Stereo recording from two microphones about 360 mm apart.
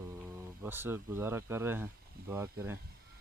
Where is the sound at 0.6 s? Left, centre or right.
Centre.